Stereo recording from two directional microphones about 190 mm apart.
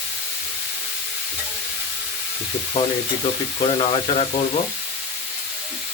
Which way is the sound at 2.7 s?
30° left (ahead or behind).